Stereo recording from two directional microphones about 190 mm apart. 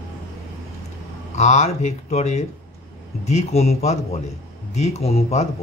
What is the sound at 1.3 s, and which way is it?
A man's voice, 35° left (ahead or behind).